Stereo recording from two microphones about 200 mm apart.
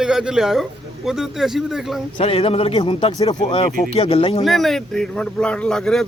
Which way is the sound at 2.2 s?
30° left (ahead or behind).